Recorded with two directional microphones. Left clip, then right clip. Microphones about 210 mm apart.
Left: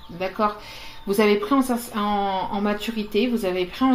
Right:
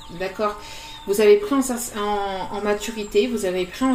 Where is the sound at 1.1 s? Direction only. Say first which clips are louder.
Right 3 dB; 35° left (ahead or behind).